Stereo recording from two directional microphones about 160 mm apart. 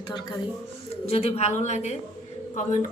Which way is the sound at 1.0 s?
40° left (ahead or behind).